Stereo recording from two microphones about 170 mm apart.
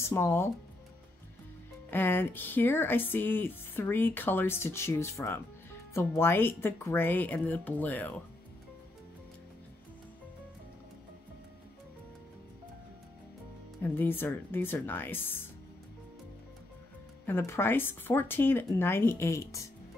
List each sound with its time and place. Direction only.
0.0 s speech: 15° left (ahead or behind)
1.9 s speech: 10° left (ahead or behind)
13.9 s speech: 15° left (ahead or behind)
17.3 s speech: 15° left (ahead or behind)